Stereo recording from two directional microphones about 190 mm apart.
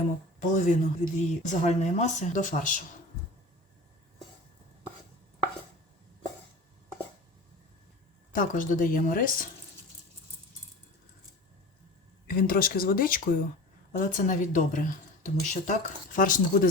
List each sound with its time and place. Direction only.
0.6 s speech: 40° left (ahead or behind)
8.3 s speech: 45° left (ahead or behind)
12.3 s speech: 50° left (ahead or behind)